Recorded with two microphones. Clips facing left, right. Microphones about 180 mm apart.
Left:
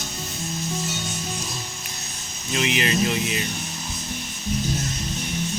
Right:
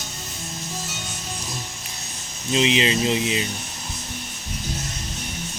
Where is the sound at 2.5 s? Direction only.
20° right (ahead or behind).